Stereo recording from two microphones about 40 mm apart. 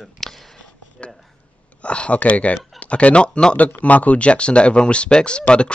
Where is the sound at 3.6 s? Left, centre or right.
Left.